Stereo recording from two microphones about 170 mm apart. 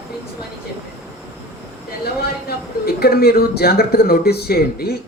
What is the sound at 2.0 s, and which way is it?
A man's voice, 65° left (ahead or behind).